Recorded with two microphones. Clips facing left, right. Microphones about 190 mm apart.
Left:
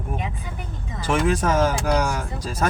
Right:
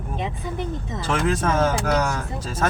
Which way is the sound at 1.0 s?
10° left (ahead or behind).